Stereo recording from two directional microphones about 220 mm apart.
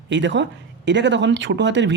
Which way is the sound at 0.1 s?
55° right (ahead or behind).